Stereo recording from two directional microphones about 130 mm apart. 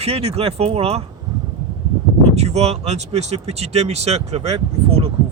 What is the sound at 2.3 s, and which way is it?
Speech, 55° right (ahead or behind).